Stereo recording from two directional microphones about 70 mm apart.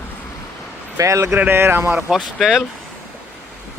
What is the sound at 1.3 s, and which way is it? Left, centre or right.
Speech, right.